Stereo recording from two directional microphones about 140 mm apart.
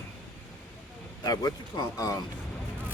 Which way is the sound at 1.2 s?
30° left (ahead or behind).